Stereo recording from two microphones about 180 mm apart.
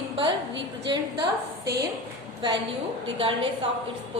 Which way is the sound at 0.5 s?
80° right.